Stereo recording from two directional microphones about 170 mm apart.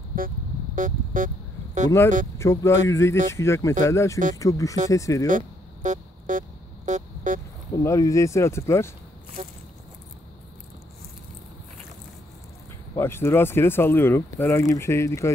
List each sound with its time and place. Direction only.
0.1 s music: 55° right (ahead or behind)
2.3 s speech: 15° left (ahead or behind)
5.2 s music: 45° right (ahead or behind)
7.7 s speech: 20° left (ahead or behind)
12.9 s speech: 15° left (ahead or behind)